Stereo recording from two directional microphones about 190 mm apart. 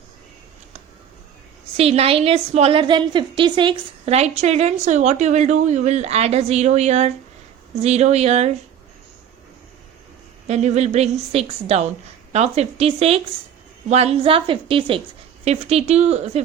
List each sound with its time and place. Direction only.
1.7 s a woman's voice: 35° right (ahead or behind)
10.4 s a woman's voice: 35° right (ahead or behind)